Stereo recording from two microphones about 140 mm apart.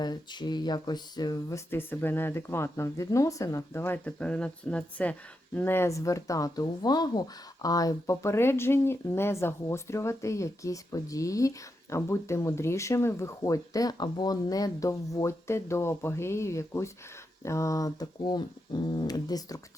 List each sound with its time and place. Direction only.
0.0 s speech: 30° left (ahead or behind)